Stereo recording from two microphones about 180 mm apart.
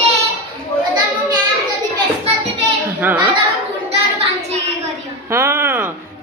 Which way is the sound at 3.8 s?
35° right (ahead or behind).